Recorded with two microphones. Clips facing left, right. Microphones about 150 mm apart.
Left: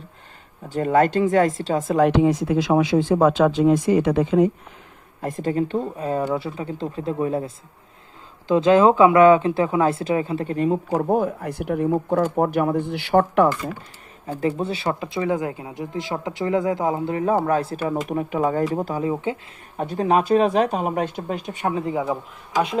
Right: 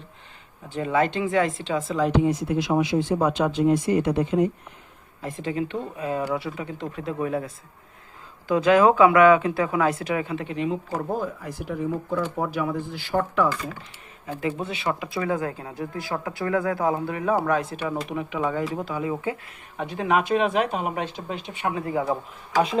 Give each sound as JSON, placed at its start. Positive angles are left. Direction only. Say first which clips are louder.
{"t": 0.7, "sound": "speech", "louder": "left 5 dB", "side_deg": 45}
{"t": 2.0, "sound": "speech", "louder": "left 5 dB", "side_deg": 80}
{"t": 5.2, "sound": "speech", "louder": "left 5 dB", "side_deg": 45}
{"t": 11.1, "sound": "speech", "louder": "left 7 dB", "side_deg": 60}
{"t": 14.3, "sound": "speech", "louder": "left 5 dB", "side_deg": 35}
{"t": 15.1, "sound": "speech", "louder": "left 3 dB", "side_deg": 20}
{"t": 17.4, "sound": "speech", "louder": "left 3 dB", "side_deg": 35}
{"t": 19.1, "sound": "speech", "louder": "left 3 dB", "side_deg": 25}
{"t": 19.7, "sound": "speech", "louder": "left 4 dB", "side_deg": 40}
{"t": 21.8, "sound": "speech", "louder": "even", "side_deg": 20}